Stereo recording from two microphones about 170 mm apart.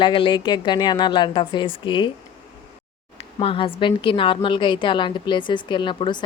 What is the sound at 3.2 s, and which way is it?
A woman's voice, 30° left (ahead or behind).